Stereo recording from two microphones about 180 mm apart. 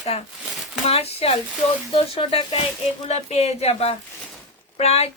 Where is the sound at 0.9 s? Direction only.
35° left (ahead or behind).